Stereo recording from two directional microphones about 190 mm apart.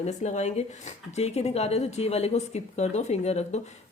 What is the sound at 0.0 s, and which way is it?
Speech, 40° left (ahead or behind).